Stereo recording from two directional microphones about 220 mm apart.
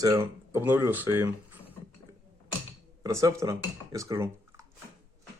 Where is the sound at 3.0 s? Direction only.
15° right (ahead or behind).